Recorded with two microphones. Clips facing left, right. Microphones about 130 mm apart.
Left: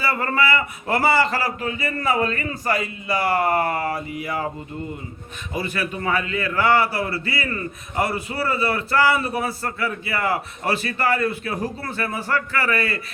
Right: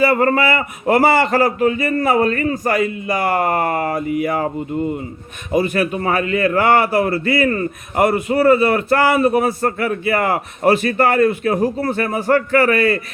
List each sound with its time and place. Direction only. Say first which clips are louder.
0.0 s a man's voice: right 8 dB; 45° right (ahead or behind)
5.5 s a man's voice: right 9 dB; 45° right (ahead or behind)